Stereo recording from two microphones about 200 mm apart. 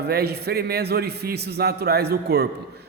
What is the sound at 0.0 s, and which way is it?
A man's voice, 55° right (ahead or behind).